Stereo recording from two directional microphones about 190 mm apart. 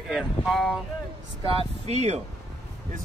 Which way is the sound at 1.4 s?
30° right (ahead or behind).